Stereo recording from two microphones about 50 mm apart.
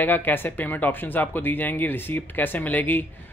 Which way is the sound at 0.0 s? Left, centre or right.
Left.